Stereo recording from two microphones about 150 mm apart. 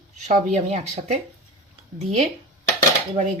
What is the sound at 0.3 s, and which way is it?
Speech, 50° right (ahead or behind).